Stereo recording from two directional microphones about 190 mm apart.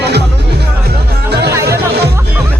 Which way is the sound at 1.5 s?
15° right (ahead or behind).